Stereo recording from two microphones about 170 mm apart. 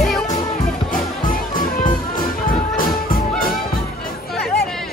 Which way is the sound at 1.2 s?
55° left (ahead or behind).